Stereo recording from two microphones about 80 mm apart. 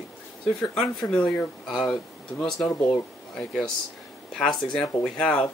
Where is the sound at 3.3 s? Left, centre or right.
Centre.